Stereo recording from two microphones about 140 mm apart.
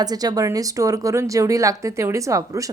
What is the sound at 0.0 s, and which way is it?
Speech, 25° right (ahead or behind).